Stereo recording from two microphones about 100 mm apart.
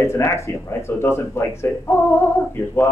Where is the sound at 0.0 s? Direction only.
30° left (ahead or behind).